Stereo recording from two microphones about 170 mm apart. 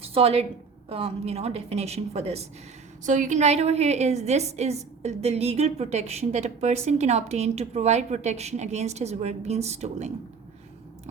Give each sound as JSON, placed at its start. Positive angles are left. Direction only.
{"t": 0.0, "sound": "a woman's voice", "side_deg": -35}